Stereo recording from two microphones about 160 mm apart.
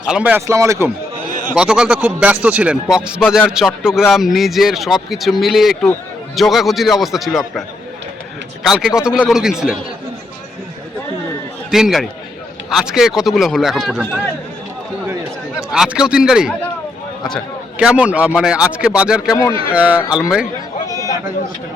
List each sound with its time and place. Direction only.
0.1 s speech: 10° right (ahead or behind)
1.5 s a man's voice: 5° right (ahead or behind)
8.6 s a man's voice: 5° right (ahead or behind)
11.7 s a man's voice: centre (ahead or behind)
15.7 s a man's voice: 5° right (ahead or behind)
20.8 s a sound: 20° left (ahead or behind)